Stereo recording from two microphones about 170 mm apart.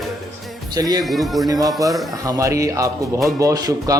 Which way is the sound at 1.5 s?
20° right (ahead or behind).